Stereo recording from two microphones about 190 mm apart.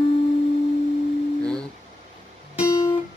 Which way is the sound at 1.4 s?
5° left (ahead or behind).